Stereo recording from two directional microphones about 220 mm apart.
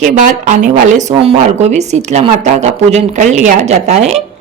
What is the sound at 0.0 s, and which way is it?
A woman's voice, 35° right (ahead or behind).